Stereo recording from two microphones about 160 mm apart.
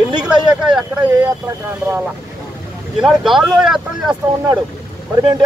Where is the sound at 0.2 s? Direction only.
5° right (ahead or behind).